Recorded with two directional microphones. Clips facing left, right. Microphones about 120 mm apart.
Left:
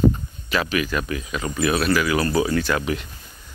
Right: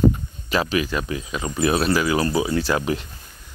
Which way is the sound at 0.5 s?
30° right (ahead or behind).